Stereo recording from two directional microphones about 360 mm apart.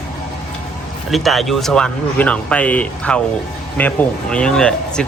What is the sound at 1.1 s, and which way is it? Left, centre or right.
Speech, centre.